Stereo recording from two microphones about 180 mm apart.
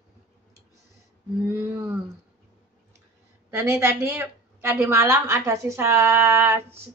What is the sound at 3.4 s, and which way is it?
A woman's voice, 10° right (ahead or behind).